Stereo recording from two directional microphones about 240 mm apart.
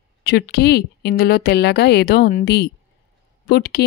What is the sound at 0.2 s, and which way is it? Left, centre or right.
Speech, left.